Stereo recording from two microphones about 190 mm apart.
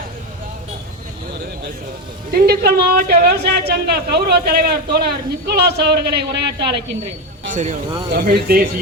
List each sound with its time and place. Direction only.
2.3 s a man's voice: 55° right (ahead or behind)
7.5 s speech: 40° right (ahead or behind)
8.1 s a man's voice: 60° right (ahead or behind)